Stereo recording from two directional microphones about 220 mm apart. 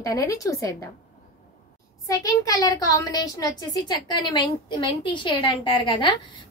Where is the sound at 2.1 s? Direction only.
15° left (ahead or behind).